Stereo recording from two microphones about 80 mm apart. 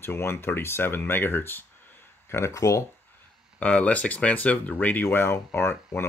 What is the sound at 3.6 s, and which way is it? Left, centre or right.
Speech, centre.